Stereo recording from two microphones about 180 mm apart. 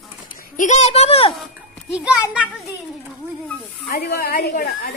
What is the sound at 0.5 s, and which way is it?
Speech, 40° left (ahead or behind).